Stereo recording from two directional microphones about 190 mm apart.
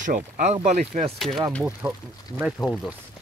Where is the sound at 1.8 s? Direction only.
20° right (ahead or behind).